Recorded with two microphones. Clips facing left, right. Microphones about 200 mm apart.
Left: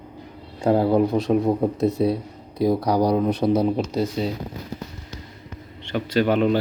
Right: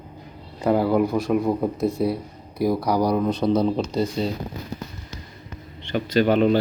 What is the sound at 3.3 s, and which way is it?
Speech, 5° left (ahead or behind).